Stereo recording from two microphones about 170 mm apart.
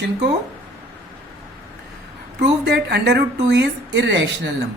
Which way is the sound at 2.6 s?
80° right.